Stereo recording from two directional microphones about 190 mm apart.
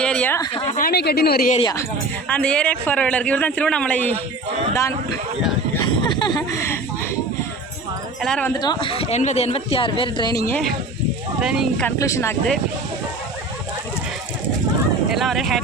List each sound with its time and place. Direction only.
0.0 s a sound: 5° left (ahead or behind)
0.8 s speech: 55° left (ahead or behind)
2.2 s a man's voice: 5° left (ahead or behind)
5.8 s a sound: 25° left (ahead or behind)
8.2 s speech: 5° left (ahead or behind)
8.5 s speech: 20° left (ahead or behind)
11.3 s speech: 5° right (ahead or behind)
11.9 s a man's voice: 15° left (ahead or behind)
15.1 s speech: centre (ahead or behind)